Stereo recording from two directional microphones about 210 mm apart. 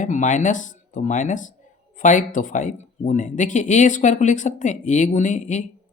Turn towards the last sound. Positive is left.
turn(degrees=35)  # may be behind; listen again after turning